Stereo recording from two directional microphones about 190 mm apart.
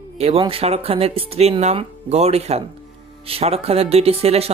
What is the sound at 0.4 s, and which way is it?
Speech, 30° right (ahead or behind).